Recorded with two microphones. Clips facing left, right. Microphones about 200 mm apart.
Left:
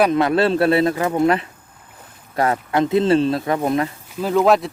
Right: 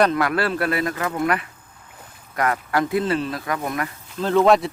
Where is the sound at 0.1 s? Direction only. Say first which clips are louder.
Left 5 dB; 25° left (ahead or behind).